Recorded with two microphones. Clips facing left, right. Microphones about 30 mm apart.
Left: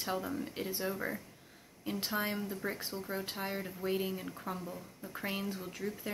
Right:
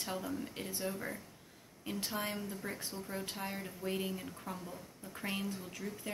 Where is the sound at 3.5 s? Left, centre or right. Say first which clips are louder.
Left 6 dB; centre.